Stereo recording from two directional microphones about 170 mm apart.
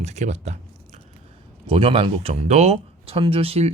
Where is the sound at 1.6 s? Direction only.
30° right (ahead or behind).